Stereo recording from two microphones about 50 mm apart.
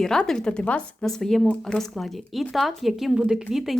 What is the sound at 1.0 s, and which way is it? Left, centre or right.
A woman's voice, centre.